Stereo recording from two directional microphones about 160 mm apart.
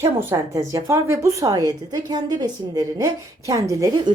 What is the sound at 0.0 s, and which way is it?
A woman's voice, 15° right (ahead or behind).